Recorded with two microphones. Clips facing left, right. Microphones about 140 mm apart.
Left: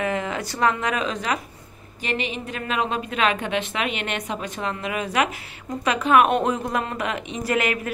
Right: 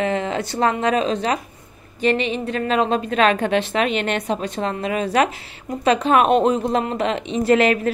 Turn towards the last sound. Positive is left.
turn(degrees=-30)  # may be behind; listen again after turning